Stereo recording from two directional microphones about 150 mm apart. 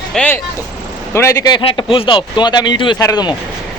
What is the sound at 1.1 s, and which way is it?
A man's voice, 20° left (ahead or behind).